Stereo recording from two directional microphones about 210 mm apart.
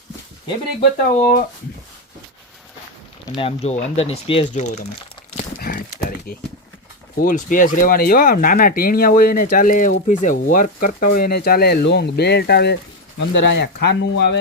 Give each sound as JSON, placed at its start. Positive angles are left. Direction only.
{"t": 1.2, "sound": "speech", "side_deg": 40}
{"t": 3.3, "sound": "speech", "side_deg": 30}
{"t": 5.4, "sound": "a sound", "side_deg": 45}
{"t": 7.2, "sound": "speech", "side_deg": 40}